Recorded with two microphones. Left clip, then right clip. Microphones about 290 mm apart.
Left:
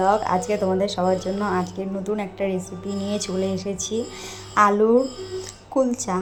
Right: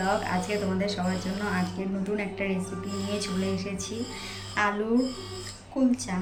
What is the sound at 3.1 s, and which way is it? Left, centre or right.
Speech, centre.